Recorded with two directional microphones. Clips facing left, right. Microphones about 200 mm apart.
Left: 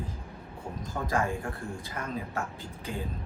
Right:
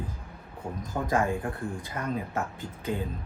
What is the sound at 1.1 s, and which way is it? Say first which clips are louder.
Speech: right 3 dB; 20° right (ahead or behind).